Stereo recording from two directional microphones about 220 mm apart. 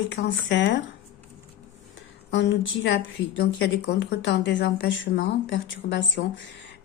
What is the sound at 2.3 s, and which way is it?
A woman's voice, 55° left (ahead or behind).